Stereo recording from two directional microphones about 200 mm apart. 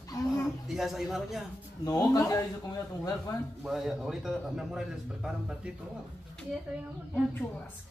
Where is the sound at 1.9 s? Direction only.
15° left (ahead or behind).